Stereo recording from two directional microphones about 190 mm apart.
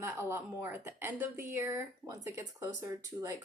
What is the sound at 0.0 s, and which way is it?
A woman's voice, 15° right (ahead or behind).